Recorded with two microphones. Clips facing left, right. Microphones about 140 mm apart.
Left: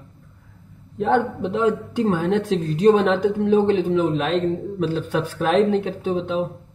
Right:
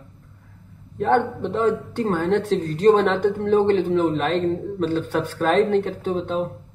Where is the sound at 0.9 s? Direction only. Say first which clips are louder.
Even; 10° left (ahead or behind).